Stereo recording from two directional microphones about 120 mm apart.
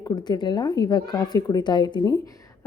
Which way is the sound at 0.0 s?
35° left (ahead or behind).